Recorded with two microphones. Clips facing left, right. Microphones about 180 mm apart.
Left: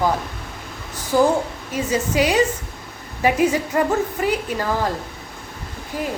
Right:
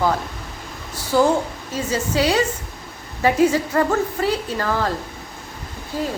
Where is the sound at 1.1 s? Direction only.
15° left (ahead or behind).